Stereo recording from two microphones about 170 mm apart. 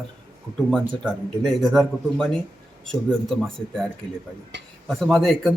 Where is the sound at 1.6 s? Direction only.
Centre (ahead or behind).